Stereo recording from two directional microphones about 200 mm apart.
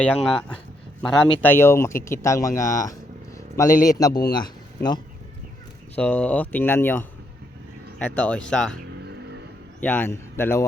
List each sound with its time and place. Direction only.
0.0 s speech: 5° left (ahead or behind)
3.3 s a sound: 15° left (ahead or behind)
3.8 s speech: 20° left (ahead or behind)
6.0 s speech: 5° left (ahead or behind)
9.8 s speech: 10° left (ahead or behind)